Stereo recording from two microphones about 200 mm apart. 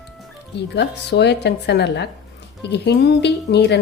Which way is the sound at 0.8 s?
60° left (ahead or behind).